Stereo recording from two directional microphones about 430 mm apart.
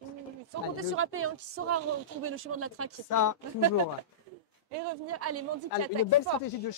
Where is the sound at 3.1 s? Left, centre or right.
Left.